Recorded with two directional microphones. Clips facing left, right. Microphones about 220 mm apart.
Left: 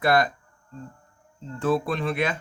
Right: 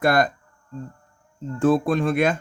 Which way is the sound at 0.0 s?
45° right (ahead or behind).